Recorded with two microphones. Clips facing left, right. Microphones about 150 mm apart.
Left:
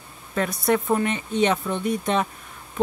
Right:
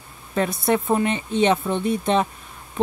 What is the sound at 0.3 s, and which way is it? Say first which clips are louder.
A woman's voice: right 1 dB; 25° right (ahead or behind).